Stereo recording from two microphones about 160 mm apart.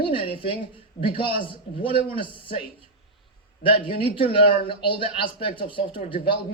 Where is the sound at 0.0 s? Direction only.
35° left (ahead or behind).